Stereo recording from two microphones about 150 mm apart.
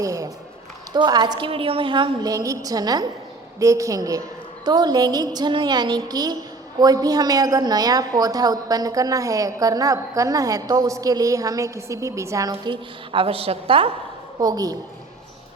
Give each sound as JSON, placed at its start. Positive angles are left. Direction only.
{"t": 0.0, "sound": "a woman's voice", "side_deg": -20}
{"t": 14.3, "sound": "a woman's voice", "side_deg": -25}